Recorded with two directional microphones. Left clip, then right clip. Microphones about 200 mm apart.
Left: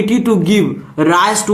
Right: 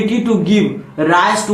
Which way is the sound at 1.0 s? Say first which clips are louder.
Left 1 dB; 35° left (ahead or behind).